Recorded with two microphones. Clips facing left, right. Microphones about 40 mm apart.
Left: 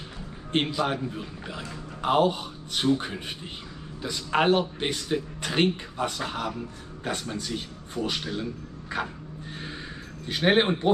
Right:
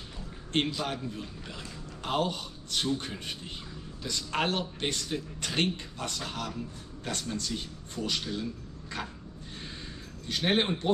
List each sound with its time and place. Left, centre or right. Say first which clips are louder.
0.5 s a man's voice: left 4 dB; centre
10.2 s speech: left 6 dB; centre